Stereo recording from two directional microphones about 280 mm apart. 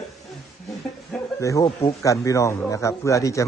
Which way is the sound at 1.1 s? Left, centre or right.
Centre.